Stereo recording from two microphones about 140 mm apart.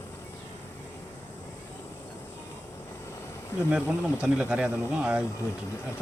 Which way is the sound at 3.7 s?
10° right (ahead or behind).